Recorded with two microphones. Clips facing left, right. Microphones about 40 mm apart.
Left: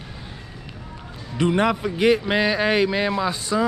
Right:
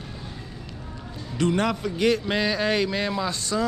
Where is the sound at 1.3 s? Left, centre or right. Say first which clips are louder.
Left 3 dB; left.